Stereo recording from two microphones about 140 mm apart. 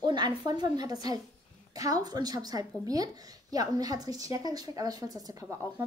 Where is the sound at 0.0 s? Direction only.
30° right (ahead or behind).